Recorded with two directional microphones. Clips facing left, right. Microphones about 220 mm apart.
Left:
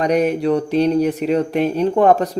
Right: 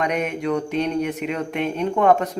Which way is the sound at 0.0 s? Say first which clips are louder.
Left 7 dB; 35° left (ahead or behind).